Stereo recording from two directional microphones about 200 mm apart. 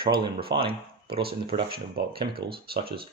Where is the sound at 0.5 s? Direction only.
25° right (ahead or behind).